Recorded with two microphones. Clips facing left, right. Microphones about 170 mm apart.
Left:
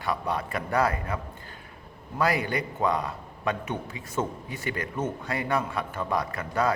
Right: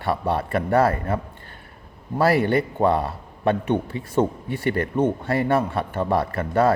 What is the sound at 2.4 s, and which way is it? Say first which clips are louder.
Speech: right 9 dB; 55° right (ahead or behind).